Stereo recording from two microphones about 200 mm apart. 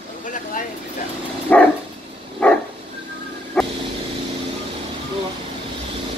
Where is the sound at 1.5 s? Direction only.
10° left (ahead or behind).